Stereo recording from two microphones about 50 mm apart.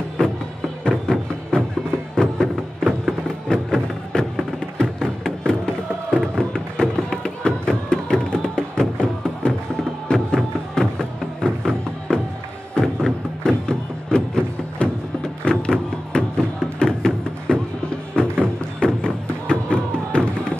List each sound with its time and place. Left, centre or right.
0.2 s music: centre
13.4 s music: centre